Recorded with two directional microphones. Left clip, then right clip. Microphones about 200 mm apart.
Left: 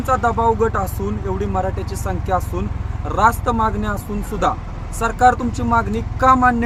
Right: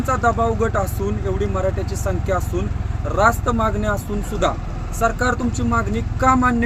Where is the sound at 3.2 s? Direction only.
20° left (ahead or behind).